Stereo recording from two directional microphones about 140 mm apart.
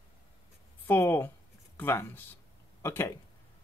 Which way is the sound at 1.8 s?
15° left (ahead or behind).